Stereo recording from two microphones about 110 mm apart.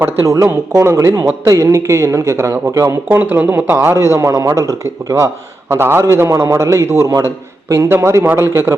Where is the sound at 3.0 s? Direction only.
20° right (ahead or behind).